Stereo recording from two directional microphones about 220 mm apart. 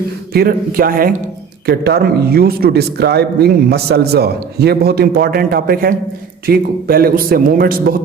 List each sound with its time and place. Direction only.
0.3 s a man's voice: 40° right (ahead or behind)